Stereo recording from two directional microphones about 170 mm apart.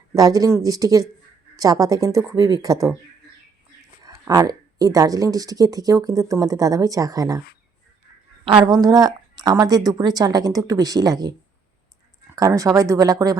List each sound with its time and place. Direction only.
0.1 s speech: 20° right (ahead or behind)
4.0 s speech: 20° right (ahead or behind)
8.4 s speech: 25° right (ahead or behind)